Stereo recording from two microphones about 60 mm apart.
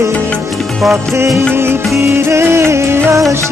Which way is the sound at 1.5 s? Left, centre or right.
Right.